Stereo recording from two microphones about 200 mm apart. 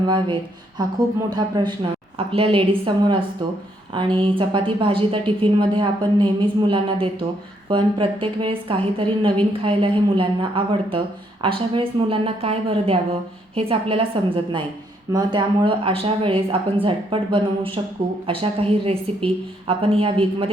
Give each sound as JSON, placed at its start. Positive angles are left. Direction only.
{"t": 0.8, "sound": "a woman's voice", "side_deg": -20}